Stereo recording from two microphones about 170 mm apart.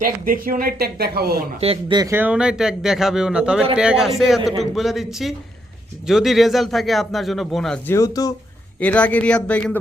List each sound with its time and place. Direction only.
0.0 s speech: 55° right (ahead or behind)
1.6 s speech: 35° right (ahead or behind)
2.0 s a man's voice: 15° right (ahead or behind); by 7.8 s centre (ahead or behind)
7.9 s speech: 20° left (ahead or behind)
8.8 s a man's voice: 10° left (ahead or behind)